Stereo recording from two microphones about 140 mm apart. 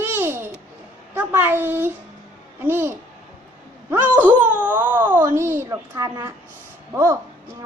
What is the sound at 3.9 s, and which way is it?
A child's voice, 15° right (ahead or behind).